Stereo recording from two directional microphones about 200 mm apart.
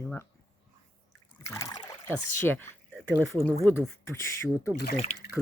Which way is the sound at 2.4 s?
10° left (ahead or behind).